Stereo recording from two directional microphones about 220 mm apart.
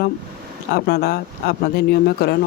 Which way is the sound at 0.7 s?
45° left (ahead or behind).